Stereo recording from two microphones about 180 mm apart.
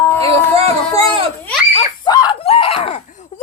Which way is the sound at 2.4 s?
35° left (ahead or behind).